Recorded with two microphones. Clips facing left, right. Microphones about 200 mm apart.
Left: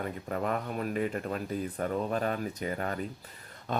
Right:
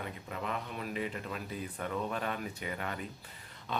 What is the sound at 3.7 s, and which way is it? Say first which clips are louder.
Dog: left 5 dB; 45° left (ahead or behind).